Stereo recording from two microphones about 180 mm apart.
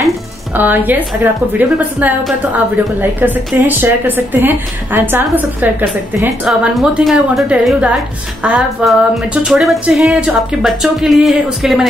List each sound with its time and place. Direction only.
0.6 s a woman's voice: 10° right (ahead or behind)